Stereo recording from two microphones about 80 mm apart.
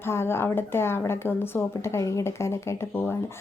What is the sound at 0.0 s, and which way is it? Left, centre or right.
A woman's voice, left.